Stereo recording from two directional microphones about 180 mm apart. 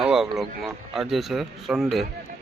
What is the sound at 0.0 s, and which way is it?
Speech, 5° right (ahead or behind).